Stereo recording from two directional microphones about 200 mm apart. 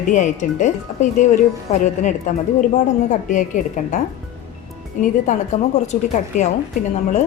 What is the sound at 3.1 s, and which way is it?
Speech, 40° left (ahead or behind).